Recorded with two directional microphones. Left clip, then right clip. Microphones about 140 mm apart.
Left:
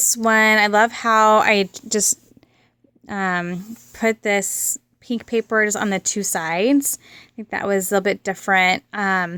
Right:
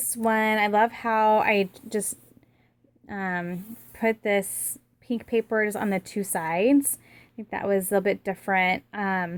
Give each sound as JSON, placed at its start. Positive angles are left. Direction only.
{"t": 0.0, "sound": "a woman's voice", "side_deg": 35}